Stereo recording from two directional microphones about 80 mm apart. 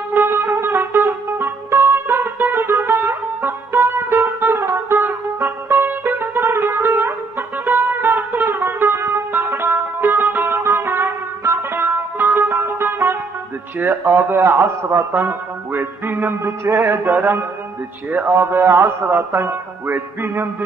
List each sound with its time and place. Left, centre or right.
0.1 s music: right
13.7 s speech: right